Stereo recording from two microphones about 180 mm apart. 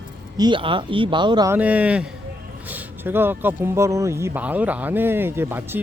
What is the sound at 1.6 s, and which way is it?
Speech, 10° right (ahead or behind).